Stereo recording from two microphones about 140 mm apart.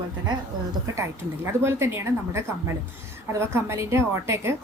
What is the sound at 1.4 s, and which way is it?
A woman's voice, 20° right (ahead or behind).